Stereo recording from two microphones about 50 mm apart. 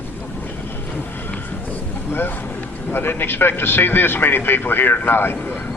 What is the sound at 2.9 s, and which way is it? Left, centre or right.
A man's voice, left.